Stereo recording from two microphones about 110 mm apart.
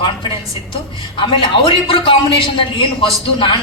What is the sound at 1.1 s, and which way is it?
A woman's voice, 50° left (ahead or behind).